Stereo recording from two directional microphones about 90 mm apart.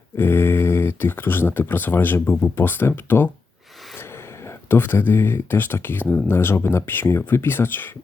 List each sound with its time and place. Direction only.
0.2 s speech: 25° left (ahead or behind)
4.4 s speech: 25° left (ahead or behind)